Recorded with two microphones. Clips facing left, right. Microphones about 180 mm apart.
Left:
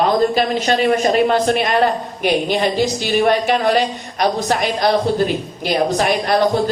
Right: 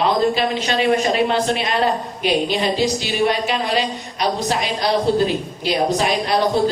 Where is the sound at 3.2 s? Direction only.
50° left (ahead or behind).